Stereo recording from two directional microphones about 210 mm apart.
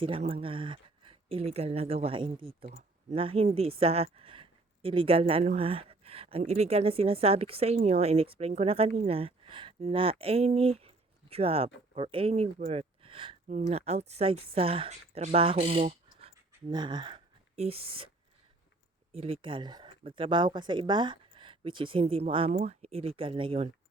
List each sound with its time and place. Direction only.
0.0 s speech: 25° right (ahead or behind)
19.1 s speech: 25° right (ahead or behind)